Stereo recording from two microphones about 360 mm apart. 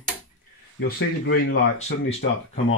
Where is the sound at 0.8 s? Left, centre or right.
Left.